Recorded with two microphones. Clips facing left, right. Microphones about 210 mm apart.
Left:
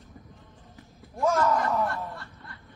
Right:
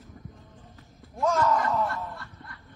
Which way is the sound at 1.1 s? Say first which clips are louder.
Left 1 dB; 10° left (ahead or behind).